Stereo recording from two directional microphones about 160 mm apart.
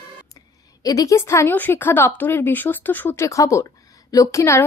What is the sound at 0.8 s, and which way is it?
A woman's voice, 20° left (ahead or behind).